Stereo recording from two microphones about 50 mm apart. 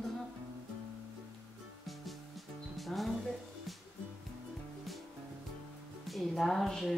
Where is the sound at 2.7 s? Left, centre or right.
Centre.